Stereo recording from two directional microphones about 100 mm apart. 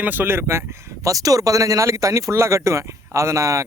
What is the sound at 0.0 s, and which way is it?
Speech, 20° right (ahead or behind).